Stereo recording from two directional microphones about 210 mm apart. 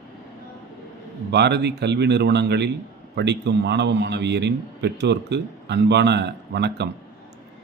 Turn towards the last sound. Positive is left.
turn(degrees=-55)  # may be behind; listen again after turning